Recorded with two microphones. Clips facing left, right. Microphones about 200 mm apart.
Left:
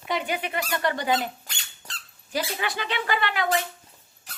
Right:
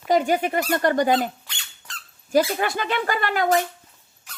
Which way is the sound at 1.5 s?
40° left (ahead or behind).